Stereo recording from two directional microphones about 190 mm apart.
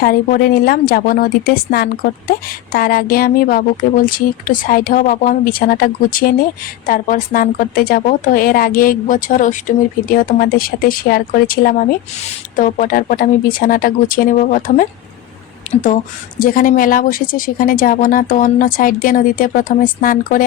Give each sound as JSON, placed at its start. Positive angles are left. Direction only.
{"t": 0.0, "sound": "a woman's voice", "side_deg": 50}